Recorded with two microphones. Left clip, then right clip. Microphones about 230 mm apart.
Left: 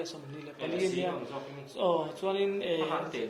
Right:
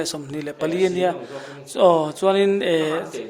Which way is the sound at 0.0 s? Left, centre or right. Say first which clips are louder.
Right 13 dB; right.